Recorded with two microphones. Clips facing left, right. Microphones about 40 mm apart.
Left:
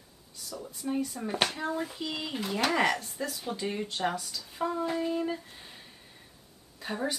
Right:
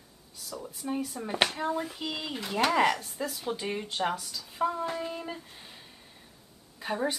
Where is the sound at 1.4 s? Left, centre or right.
Right.